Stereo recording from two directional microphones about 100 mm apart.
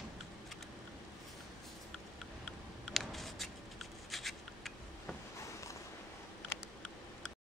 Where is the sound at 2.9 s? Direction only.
Centre (ahead or behind).